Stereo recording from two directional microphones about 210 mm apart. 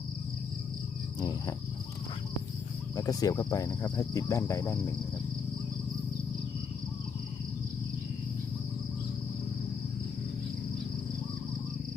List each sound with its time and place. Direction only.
1.2 s cricket: 15° left (ahead or behind)
2.9 s cricket: 15° left (ahead or behind)